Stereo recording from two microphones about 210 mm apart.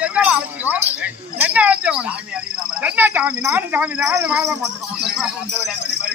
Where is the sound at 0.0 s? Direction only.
5° right (ahead or behind).